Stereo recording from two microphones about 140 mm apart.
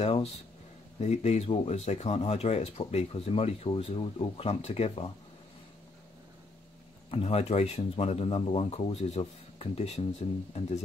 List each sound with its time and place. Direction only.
0.0 s a sound: 45° left (ahead or behind)
1.0 s speech: 50° left (ahead or behind)
7.1 s speech: 45° left (ahead or behind)